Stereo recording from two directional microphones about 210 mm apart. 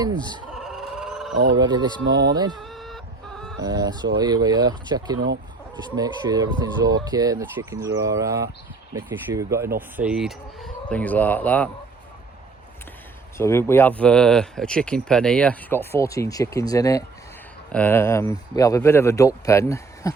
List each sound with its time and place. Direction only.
0.5 s a sound: centre (ahead or behind)
1.5 s speech: 20° right (ahead or behind)
2.0 s speech: 55° right (ahead or behind)
2.3 s speech: 20° right (ahead or behind)
2.6 s chicken: centre (ahead or behind)
3.6 s speech: 20° right (ahead or behind)
10.0 s speech: 5° right (ahead or behind)
13.3 s speech: 10° left (ahead or behind)